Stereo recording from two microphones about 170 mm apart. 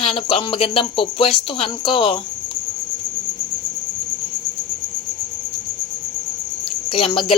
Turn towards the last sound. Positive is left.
turn(degrees=30)  # may be behind; listen again after turning